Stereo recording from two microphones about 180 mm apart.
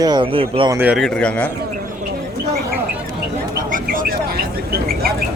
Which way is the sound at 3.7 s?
50° right (ahead or behind).